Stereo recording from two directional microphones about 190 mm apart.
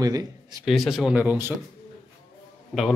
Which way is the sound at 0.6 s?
Centre (ahead or behind).